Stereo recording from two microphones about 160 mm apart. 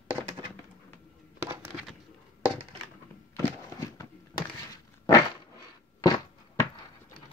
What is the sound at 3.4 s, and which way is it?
Walk, 20° left (ahead or behind).